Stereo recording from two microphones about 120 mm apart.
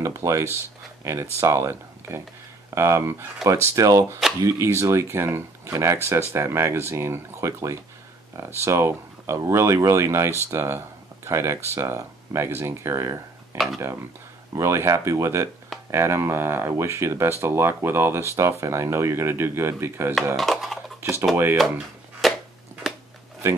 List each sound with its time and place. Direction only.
0.0 s speech: 25° right (ahead or behind)
20.3 s speech: centre (ahead or behind)
21.0 s speech: 20° right (ahead or behind)
21.5 s a sound: centre (ahead or behind)